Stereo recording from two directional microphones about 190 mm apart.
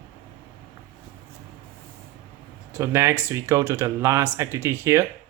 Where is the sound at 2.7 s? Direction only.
15° right (ahead or behind).